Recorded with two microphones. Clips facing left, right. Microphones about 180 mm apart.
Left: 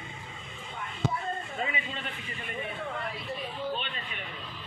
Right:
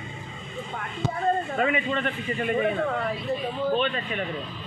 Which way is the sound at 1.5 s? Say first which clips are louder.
Right 10 dB; 60° right (ahead or behind).